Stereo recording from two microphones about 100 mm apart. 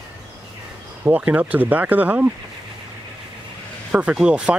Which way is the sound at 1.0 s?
15° right (ahead or behind).